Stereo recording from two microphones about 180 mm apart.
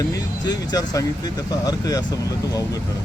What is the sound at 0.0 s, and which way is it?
Speech, 20° left (ahead or behind).